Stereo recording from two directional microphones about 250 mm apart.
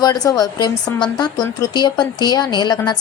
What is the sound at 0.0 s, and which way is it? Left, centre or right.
Speech, centre.